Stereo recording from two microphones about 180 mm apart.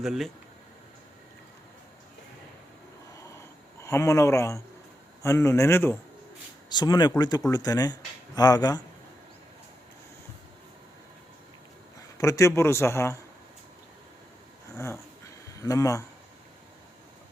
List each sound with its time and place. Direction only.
0.0 s speech: centre (ahead or behind)
3.8 s a man's voice: 15° left (ahead or behind)
12.1 s a man's voice: 15° left (ahead or behind)
14.8 s a man's voice: 15° left (ahead or behind)